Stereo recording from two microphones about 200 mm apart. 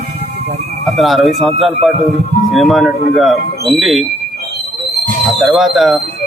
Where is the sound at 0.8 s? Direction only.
Centre (ahead or behind).